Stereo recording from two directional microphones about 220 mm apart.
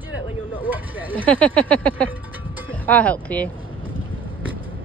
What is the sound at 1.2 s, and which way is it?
A woman's voice, 5° left (ahead or behind).